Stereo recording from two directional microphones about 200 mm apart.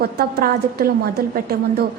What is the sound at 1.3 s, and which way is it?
Speech, 50° right (ahead or behind).